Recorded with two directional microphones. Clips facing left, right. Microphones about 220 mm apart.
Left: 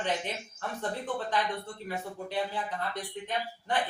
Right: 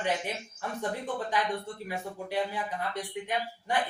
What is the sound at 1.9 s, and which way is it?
A woman's voice, 10° right (ahead or behind).